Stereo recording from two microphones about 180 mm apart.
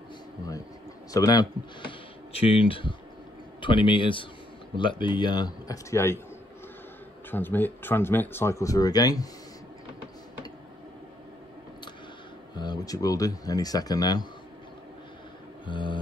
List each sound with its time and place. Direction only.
1.1 s speech: 20° left (ahead or behind)
7.2 s speech: 10° left (ahead or behind)
12.5 s speech: 20° left (ahead or behind)
15.6 s a sound: 25° left (ahead or behind)